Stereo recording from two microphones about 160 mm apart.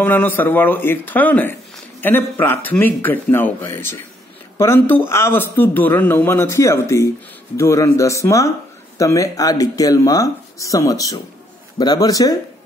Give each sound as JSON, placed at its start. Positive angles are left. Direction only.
{"t": 0.0, "sound": "a man's voice", "side_deg": 10}